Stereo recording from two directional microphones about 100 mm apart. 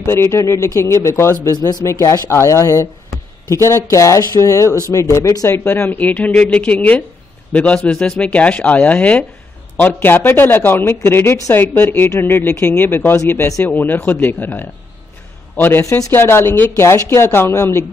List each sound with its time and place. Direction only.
0.0 s speech: 30° left (ahead or behind)
5.6 s speech: 20° left (ahead or behind)